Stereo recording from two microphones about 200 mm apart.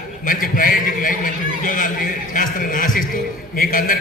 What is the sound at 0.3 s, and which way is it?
A man's voice, 45° left (ahead or behind).